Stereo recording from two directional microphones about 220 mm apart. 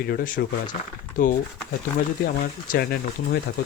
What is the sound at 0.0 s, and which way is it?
A man's voice, 40° left (ahead or behind).